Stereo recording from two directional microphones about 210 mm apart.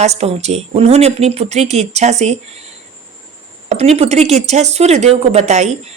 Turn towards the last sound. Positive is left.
turn(degrees=-35)  # may be behind; listen again after turning